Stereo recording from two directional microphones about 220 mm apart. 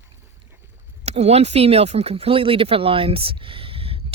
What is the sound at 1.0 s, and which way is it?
Speech, 30° right (ahead or behind).